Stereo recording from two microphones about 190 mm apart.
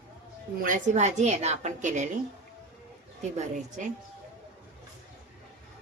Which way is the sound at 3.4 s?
40° right (ahead or behind).